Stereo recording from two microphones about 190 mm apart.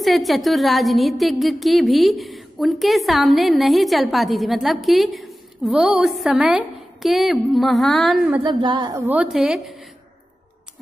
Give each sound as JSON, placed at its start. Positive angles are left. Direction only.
{"t": 0.0, "sound": "speech", "side_deg": 0}
{"t": 8.5, "sound": "a woman's voice", "side_deg": -25}
{"t": 8.9, "sound": "speech", "side_deg": -10}